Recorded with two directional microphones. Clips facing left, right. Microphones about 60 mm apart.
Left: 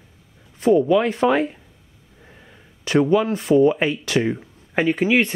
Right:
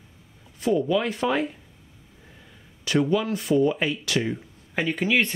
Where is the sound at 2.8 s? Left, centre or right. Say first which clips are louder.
Left 5 dB; left.